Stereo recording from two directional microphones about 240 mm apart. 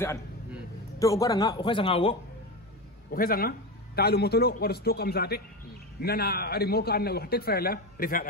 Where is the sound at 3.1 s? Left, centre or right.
Left.